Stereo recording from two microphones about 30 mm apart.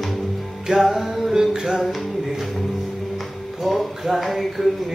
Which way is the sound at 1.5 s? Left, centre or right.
Centre.